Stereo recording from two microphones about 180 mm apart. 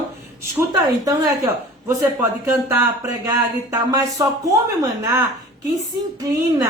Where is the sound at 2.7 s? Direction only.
15° right (ahead or behind).